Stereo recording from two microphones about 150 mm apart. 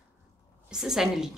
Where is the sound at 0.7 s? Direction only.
5° right (ahead or behind).